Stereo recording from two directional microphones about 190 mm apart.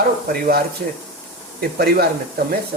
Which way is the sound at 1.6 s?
50° right (ahead or behind).